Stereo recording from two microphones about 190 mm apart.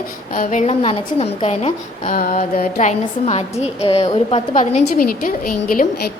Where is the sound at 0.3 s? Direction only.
40° left (ahead or behind).